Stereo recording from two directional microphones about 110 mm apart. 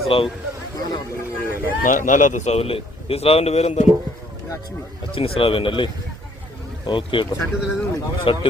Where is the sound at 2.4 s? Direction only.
75° left (ahead or behind).